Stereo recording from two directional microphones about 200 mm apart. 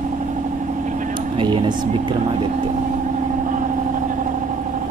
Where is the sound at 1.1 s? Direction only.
25° right (ahead or behind).